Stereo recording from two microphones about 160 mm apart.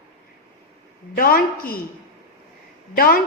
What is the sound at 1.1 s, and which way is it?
Speech, 65° left (ahead or behind).